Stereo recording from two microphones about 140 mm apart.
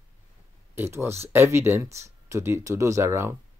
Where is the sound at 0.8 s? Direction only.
20° right (ahead or behind).